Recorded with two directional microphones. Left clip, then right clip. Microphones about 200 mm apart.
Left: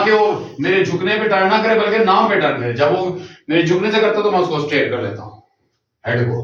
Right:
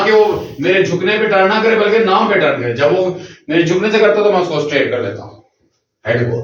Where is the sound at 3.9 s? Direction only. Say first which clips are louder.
Right 4 dB; 15° left (ahead or behind).